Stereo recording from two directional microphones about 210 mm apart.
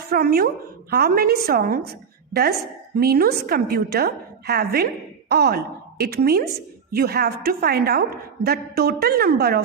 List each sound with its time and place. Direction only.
0.1 s a woman's voice: 45° right (ahead or behind)